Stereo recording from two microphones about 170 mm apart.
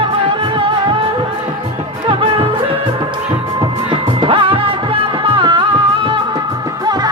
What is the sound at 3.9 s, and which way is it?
Music, 30° right (ahead or behind).